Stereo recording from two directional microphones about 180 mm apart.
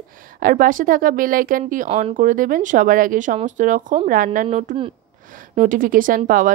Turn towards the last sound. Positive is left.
turn(degrees=-50)  # may be behind; listen again after turning